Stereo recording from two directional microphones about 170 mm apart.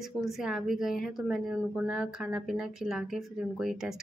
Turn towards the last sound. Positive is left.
turn(degrees=0)  # may be behind; listen again after turning